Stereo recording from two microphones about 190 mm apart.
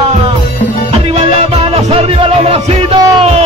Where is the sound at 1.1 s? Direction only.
30° right (ahead or behind).